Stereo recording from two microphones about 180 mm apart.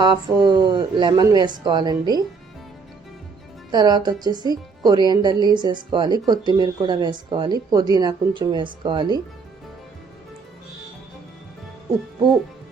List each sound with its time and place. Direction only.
0.0 s speech: 25° right (ahead or behind)
3.7 s speech: 25° right (ahead or behind)